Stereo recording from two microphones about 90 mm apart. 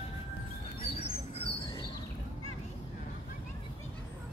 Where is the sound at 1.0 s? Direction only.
90° left.